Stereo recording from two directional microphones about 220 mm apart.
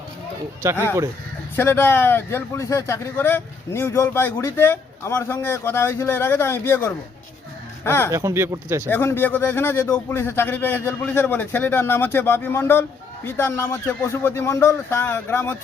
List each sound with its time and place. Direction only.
0.6 s speech: 15° right (ahead or behind)
1.5 s speech: 10° left (ahead or behind)
8.1 s speech: 15° right (ahead or behind)
8.9 s speech: 10° left (ahead or behind)